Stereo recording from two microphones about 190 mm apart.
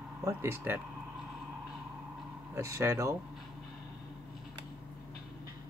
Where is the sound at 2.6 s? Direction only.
15° right (ahead or behind).